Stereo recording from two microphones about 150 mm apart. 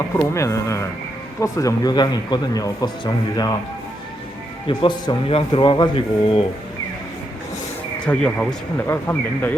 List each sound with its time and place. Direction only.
0.2 s speech: 20° left (ahead or behind)
4.8 s speech: 30° left (ahead or behind)
8.0 s speech: 5° left (ahead or behind)